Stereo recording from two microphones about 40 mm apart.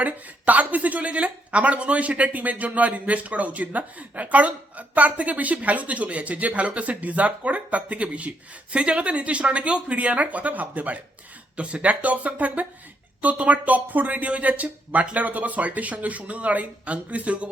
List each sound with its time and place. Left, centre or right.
0.0 s speech: right
11.5 s speech: right